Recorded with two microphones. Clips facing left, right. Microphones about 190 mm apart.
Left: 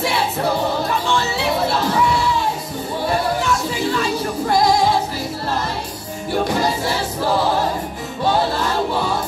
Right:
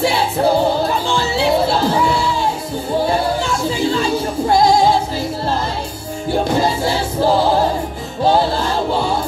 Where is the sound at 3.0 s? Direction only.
30° right (ahead or behind).